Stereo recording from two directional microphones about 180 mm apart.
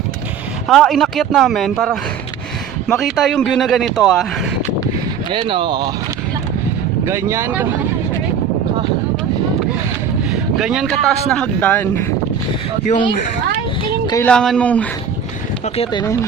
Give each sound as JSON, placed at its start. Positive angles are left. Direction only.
{"t": 0.7, "sound": "a man's voice", "side_deg": 0}
{"t": 5.3, "sound": "speech", "side_deg": -30}
{"t": 7.0, "sound": "speech", "side_deg": -15}
{"t": 10.6, "sound": "a man's voice", "side_deg": -5}
{"t": 12.8, "sound": "speech", "side_deg": 40}
{"t": 14.3, "sound": "speech", "side_deg": 5}
{"t": 15.6, "sound": "speech", "side_deg": 35}